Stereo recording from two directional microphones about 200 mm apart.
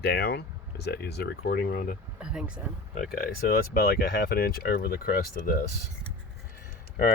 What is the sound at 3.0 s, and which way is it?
Speech, 50° left (ahead or behind).